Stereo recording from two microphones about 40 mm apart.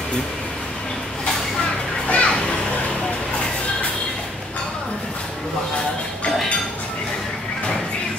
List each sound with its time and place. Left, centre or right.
2.0 s children playing: left